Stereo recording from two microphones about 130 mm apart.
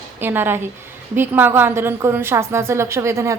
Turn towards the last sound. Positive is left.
turn(degrees=-20)  # may be behind; listen again after turning